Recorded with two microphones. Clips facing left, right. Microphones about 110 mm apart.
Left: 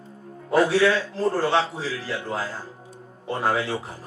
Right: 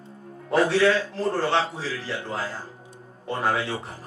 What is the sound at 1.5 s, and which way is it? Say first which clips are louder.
Speech: left 1 dB; 40° left (ahead or behind).